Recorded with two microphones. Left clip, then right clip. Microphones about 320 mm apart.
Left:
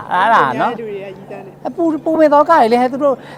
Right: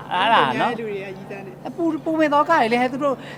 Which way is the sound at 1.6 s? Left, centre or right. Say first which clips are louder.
Left 7 dB; left.